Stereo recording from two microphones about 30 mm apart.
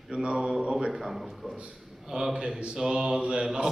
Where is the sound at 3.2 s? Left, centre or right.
Right.